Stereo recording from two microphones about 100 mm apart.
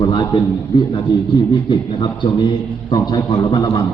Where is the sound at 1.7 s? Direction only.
50° left (ahead or behind); by 3.8 s 35° left (ahead or behind).